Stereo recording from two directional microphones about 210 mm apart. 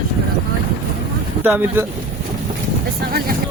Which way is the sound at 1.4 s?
10° right (ahead or behind).